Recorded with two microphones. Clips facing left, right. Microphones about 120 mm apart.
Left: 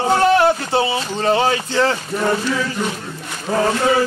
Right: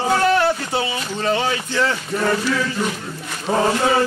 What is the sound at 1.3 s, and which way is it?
Speech, 35° left (ahead or behind).